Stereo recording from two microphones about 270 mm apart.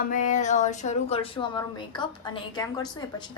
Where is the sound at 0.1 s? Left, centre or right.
Left.